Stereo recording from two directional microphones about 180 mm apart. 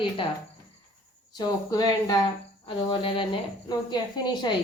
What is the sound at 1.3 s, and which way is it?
A woman's voice, 20° left (ahead or behind).